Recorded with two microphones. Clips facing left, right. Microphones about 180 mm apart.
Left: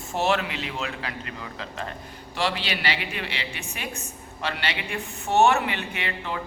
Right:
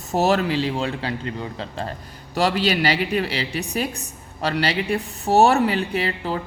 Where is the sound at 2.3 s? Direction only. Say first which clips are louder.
Right 8 dB; 40° right (ahead or behind).